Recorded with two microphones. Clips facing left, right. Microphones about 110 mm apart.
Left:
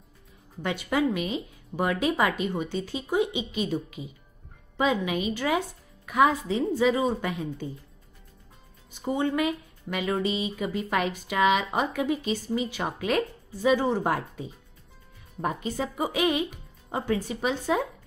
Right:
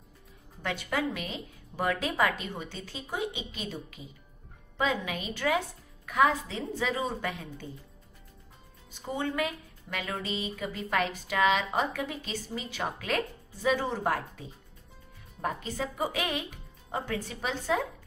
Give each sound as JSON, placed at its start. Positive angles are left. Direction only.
{"t": 0.6, "sound": "speech", "side_deg": 15}
{"t": 9.0, "sound": "speech", "side_deg": 15}
{"t": 15.4, "sound": "speech", "side_deg": 15}